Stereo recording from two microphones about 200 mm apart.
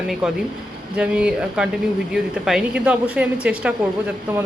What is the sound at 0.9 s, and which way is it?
A man's voice, 5° right (ahead or behind).